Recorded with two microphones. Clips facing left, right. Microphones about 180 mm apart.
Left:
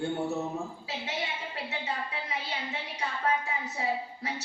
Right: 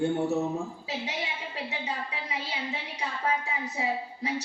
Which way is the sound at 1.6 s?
15° right (ahead or behind).